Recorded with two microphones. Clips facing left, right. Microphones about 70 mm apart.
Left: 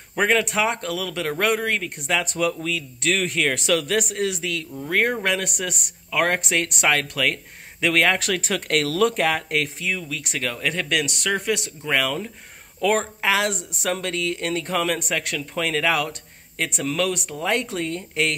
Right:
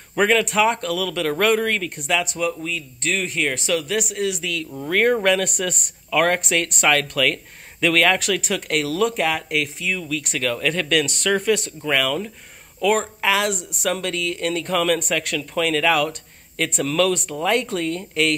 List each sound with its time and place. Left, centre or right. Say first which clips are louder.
0.1 s speech: right 2 dB; centre
2.0 s speech: right 2 dB; left
2.3 s speech: left 1 dB; left
4.8 s speech: right 4 dB; centre
11.9 s speech: right 2 dB; left
17.3 s speech: right 3 dB; left